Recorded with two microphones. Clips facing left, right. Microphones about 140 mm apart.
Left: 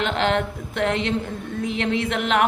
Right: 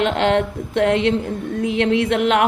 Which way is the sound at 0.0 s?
40° right (ahead or behind).